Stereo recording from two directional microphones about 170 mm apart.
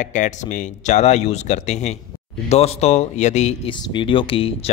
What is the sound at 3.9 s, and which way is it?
Speech, 30° left (ahead or behind).